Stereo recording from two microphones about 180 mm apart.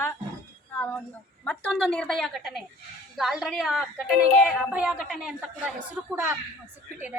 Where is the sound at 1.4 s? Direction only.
5° left (ahead or behind).